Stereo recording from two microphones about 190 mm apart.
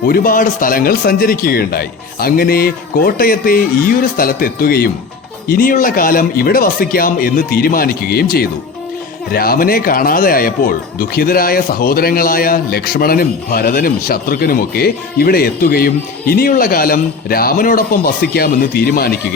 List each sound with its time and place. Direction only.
0.0 s speech: 50° left (ahead or behind)